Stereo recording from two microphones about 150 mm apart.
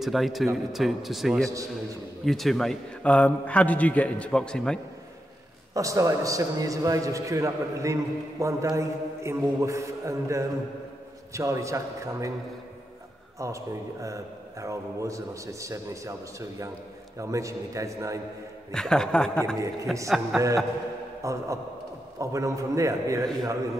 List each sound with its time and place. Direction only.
0.0 s speech: centre (ahead or behind)
1.5 s a man's voice: 20° right (ahead or behind)
2.2 s a man's voice: centre (ahead or behind)
5.8 s a man's voice: 20° right (ahead or behind)
14.0 s a man's voice: 20° right (ahead or behind)
18.7 s speech: 5° left (ahead or behind)
20.3 s a man's voice: 20° right (ahead or behind)